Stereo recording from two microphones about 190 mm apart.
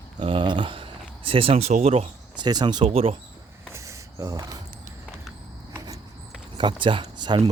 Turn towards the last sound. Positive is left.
turn(degrees=-25)  # may be behind; listen again after turning